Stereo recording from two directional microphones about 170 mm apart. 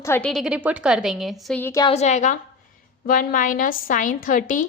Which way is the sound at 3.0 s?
55° left (ahead or behind).